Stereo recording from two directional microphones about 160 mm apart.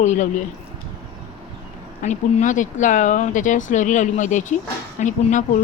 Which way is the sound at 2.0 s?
50° left (ahead or behind).